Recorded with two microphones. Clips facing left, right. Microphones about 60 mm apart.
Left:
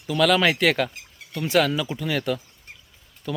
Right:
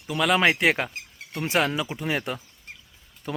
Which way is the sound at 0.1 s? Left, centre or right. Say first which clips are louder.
Left 2 dB; centre.